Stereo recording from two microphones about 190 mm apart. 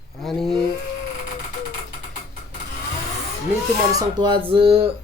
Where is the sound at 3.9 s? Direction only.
25° right (ahead or behind).